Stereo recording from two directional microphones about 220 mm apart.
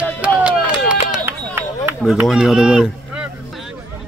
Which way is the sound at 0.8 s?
10° right (ahead or behind).